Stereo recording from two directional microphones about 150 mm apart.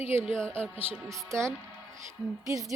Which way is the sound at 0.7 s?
15° right (ahead or behind).